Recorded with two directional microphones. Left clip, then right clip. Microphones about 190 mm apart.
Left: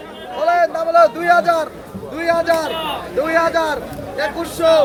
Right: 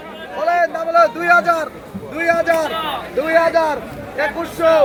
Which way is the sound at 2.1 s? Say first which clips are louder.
Right 1 dB; 35° right (ahead or behind).